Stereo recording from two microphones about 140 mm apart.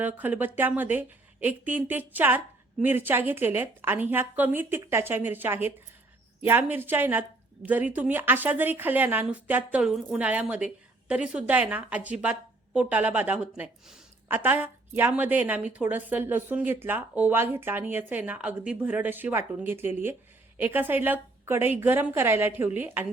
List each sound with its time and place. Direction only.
0.0 s a woman's voice: 10° right (ahead or behind)